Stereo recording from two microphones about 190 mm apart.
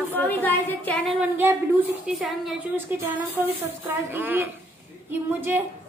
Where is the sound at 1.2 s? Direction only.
10° right (ahead or behind).